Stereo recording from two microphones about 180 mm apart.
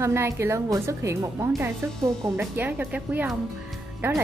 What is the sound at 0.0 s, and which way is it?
A woman's voice, 15° right (ahead or behind).